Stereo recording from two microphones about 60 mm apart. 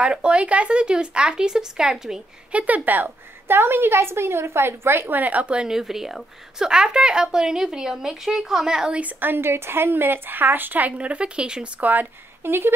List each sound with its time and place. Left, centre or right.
0.0 s a woman's voice: centre
2.5 s a woman's voice: right
9.0 s speech: right; by 11.7 s centre
11.8 s speech: right